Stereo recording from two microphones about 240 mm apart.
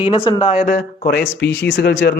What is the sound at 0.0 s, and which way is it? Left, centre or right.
Speech, left.